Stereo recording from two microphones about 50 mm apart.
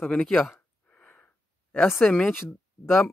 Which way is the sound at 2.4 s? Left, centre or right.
Left.